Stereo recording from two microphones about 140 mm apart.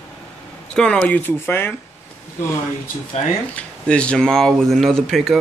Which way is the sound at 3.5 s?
10° left (ahead or behind).